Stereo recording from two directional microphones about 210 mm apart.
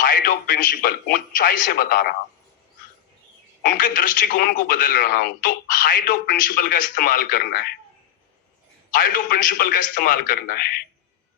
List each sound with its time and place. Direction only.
0.0 s a man's voice: 40° left (ahead or behind)
3.6 s a man's voice: 40° left (ahead or behind)
8.9 s a man's voice: 40° left (ahead or behind)